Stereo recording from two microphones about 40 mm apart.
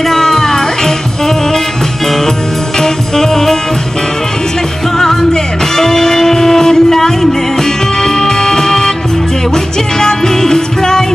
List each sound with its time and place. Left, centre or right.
0.0 s music: centre
2.8 s music: centre
4.9 s music: centre
9.9 s music: centre